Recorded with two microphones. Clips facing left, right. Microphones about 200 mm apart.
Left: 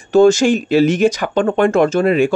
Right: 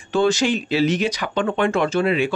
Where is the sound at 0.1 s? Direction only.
45° left (ahead or behind).